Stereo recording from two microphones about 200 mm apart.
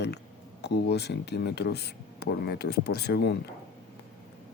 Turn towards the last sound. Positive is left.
turn(degrees=55)  # may be behind; listen again after turning